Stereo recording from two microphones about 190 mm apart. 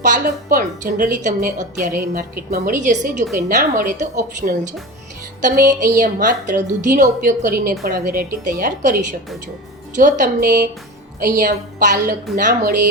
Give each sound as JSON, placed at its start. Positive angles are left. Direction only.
{"t": 0.0, "sound": "a woman's voice", "side_deg": -45}